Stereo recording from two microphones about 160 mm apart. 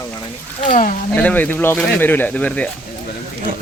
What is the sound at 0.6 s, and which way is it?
Speech, 50° left (ahead or behind).